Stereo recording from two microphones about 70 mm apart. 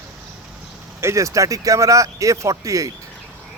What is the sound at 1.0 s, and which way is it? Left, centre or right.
Speech, right.